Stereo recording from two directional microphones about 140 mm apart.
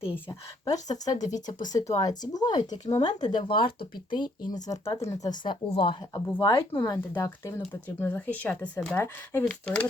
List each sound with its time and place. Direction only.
0.3 s speech: 30° left (ahead or behind)
7.1 s speech: 15° left (ahead or behind)